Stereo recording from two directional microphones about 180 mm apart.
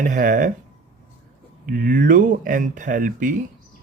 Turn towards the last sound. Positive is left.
turn(degrees=-50)  # may be behind; listen again after turning